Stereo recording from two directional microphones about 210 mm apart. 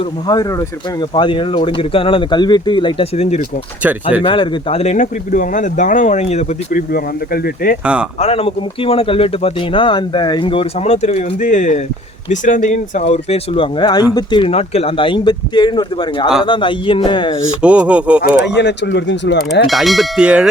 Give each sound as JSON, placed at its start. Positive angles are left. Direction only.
{"t": 1.1, "sound": "a man's voice", "side_deg": 25}
{"t": 6.9, "sound": "speech", "side_deg": 45}
{"t": 8.2, "sound": "a man's voice", "side_deg": 25}
{"t": 17.6, "sound": "bell", "side_deg": -5}
{"t": 18.4, "sound": "speech", "side_deg": 55}
{"t": 19.6, "sound": "bell", "side_deg": 0}